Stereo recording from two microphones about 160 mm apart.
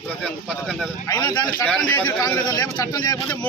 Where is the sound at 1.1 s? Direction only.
25° left (ahead or behind).